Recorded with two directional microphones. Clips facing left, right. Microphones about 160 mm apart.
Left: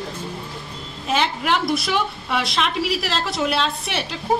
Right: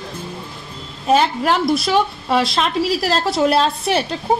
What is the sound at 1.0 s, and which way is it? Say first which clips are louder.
A woman's voice: right 6 dB; 40° right (ahead or behind).